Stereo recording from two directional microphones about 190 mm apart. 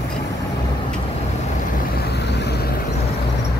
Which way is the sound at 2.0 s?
60° left (ahead or behind).